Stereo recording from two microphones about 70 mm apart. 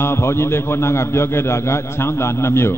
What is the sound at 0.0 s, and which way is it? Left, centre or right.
A man's voice, left.